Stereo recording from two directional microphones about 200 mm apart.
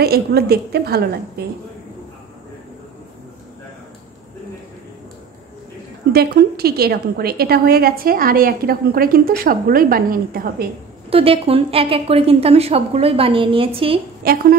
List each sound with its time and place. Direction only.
0.0 s a woman's voice: 50° right (ahead or behind)
6.1 s a woman's voice: 55° right (ahead or behind)
11.1 s a woman's voice: 30° right (ahead or behind)
14.2 s a woman's voice: 50° right (ahead or behind)